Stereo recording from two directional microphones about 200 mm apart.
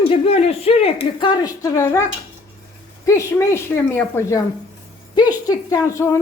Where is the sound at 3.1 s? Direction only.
15° left (ahead or behind).